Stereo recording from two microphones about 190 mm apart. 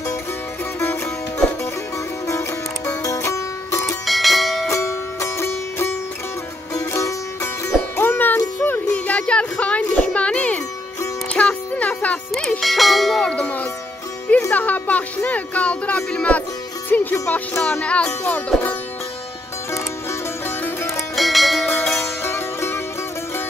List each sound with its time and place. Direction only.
3.0 s music: 15° left (ahead or behind)
4.0 s music: centre (ahead or behind)
4.6 s music: 15° left (ahead or behind)
21.2 s music: centre (ahead or behind)